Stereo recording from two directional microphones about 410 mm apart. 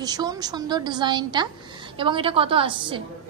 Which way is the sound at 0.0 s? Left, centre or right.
Centre.